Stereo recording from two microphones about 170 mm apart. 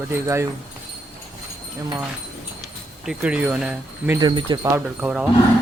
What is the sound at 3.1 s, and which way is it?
Speech, 5° right (ahead or behind).